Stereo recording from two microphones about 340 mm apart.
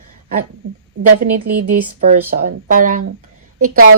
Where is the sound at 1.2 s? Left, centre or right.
Right.